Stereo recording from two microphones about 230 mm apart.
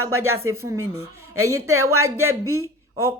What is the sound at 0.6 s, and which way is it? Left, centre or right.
Speech, centre.